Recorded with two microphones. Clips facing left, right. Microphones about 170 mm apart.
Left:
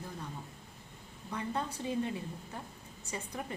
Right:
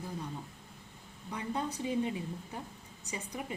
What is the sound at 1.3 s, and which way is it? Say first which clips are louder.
A woman's voice: right 1 dB; 15° right (ahead or behind).